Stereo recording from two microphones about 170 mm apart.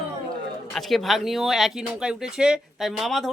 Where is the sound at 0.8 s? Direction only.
Centre (ahead or behind).